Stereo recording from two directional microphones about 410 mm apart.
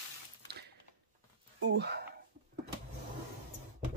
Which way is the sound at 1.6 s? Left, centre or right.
Right.